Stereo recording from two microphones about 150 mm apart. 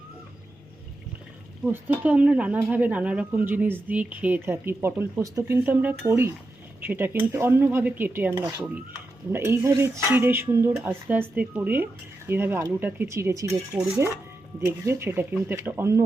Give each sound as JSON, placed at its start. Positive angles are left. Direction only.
{"t": 1.6, "sound": "speech", "side_deg": -10}